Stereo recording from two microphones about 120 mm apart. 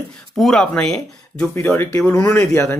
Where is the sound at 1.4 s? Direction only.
15° left (ahead or behind).